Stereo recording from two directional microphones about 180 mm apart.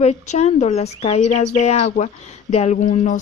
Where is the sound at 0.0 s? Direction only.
40° left (ahead or behind).